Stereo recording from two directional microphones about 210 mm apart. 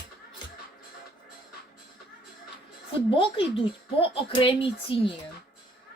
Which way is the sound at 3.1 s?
25° left (ahead or behind).